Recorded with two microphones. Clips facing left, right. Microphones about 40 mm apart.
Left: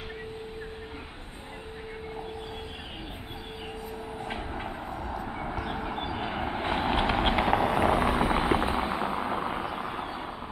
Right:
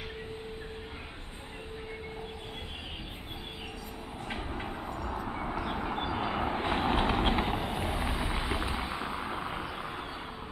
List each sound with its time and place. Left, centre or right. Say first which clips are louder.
4.3 s train: even; centre
5.3 s vehicle: even; centre
6.9 s clip-clop: left 3 dB; left
7.4 s vehicle: left 9 dB; left
8.4 s a sound: left 8 dB; left; by 9.8 s centre
9.9 s vehicle: left 5 dB; centre